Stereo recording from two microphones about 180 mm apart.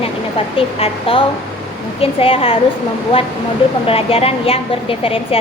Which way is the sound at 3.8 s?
30° left (ahead or behind).